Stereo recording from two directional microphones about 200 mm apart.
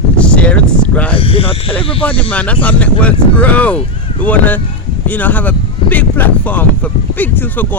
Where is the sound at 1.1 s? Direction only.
30° left (ahead or behind).